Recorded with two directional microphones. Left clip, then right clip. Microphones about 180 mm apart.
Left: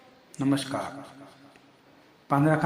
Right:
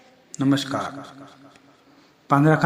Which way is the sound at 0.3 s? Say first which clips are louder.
Right 5 dB; 20° right (ahead or behind).